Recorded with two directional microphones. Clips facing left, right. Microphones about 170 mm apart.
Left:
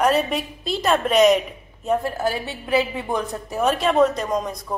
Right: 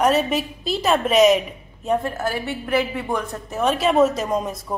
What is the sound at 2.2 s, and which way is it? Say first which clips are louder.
A woman's voice: even; 15° left (ahead or behind).